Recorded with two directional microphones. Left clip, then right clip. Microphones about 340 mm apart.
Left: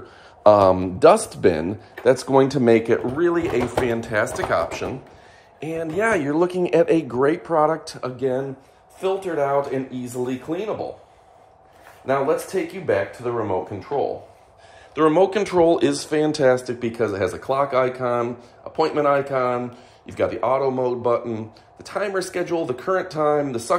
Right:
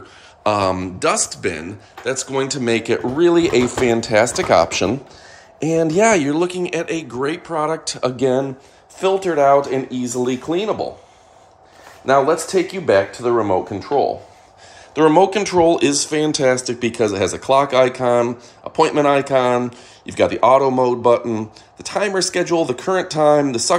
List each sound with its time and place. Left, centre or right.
0.4 s speech: centre
8.2 s speech: right
12.1 s speech: right
15.0 s speech: centre